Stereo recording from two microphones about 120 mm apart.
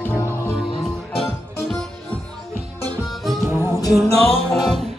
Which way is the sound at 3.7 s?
30° left (ahead or behind).